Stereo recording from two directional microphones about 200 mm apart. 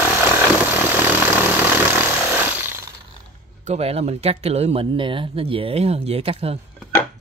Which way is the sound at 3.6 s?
35° right (ahead or behind).